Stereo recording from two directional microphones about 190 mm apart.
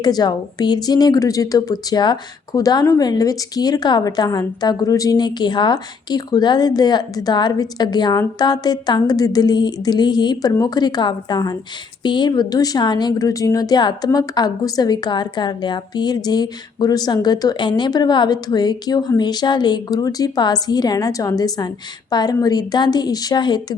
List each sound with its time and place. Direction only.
0.0 s a woman's voice: 20° left (ahead or behind)